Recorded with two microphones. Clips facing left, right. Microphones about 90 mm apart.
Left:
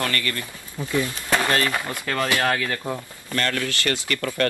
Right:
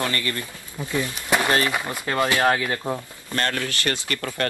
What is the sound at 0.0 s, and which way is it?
Speech, 20° right (ahead or behind).